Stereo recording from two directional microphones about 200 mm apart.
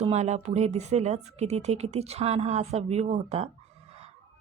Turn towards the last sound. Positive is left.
turn(degrees=-30)  # may be behind; listen again after turning